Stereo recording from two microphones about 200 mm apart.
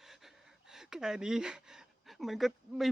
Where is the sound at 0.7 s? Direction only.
5° right (ahead or behind).